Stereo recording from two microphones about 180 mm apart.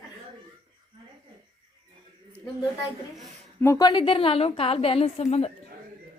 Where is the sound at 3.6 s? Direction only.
20° left (ahead or behind); by 5.5 s 35° left (ahead or behind).